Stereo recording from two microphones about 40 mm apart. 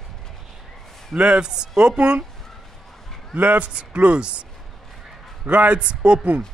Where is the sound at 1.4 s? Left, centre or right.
Centre.